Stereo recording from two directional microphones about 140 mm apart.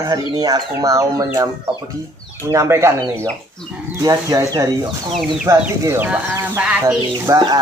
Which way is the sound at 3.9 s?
25° right (ahead or behind).